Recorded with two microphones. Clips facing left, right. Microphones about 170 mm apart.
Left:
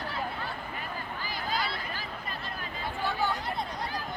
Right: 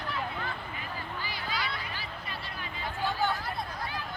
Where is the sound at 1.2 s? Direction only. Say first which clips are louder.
Left 4 dB; 45° left (ahead or behind).